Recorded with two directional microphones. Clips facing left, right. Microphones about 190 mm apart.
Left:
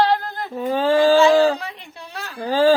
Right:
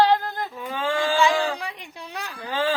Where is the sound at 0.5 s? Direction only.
40° left (ahead or behind).